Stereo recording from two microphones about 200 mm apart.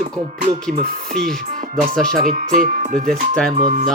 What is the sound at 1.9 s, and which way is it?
Speech, 5° left (ahead or behind).